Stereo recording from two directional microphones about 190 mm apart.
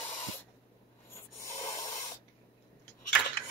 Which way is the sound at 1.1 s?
15° left (ahead or behind).